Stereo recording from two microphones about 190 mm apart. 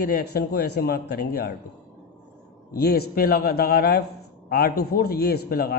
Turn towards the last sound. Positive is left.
turn(degrees=55)  # may be behind; listen again after turning